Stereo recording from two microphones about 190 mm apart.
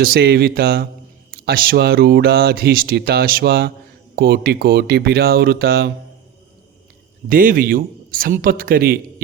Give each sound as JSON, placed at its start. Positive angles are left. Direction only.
{"t": 0.0, "sound": "speech", "side_deg": -55}
{"t": 7.3, "sound": "a man's voice", "side_deg": -45}